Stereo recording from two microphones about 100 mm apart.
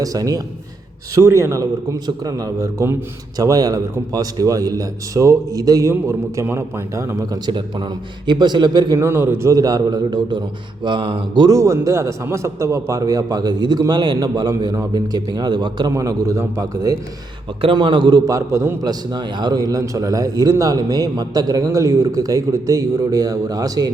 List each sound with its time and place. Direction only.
0.0 s a man's voice: 35° right (ahead or behind)
7.4 s a man's voice: 55° right (ahead or behind)
9.0 s a man's voice: 25° right (ahead or behind); by 11.4 s 55° right (ahead or behind)
11.4 s a man's voice: 30° right (ahead or behind); by 15.9 s 50° right (ahead or behind)
15.9 s a man's voice: 35° right (ahead or behind)
17.6 s a man's voice: 55° right (ahead or behind)
18.3 s a man's voice: 30° right (ahead or behind)
18.8 s a man's voice: 45° right (ahead or behind)